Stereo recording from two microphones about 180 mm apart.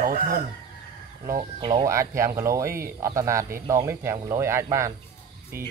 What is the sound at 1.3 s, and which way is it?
Speech, 30° right (ahead or behind).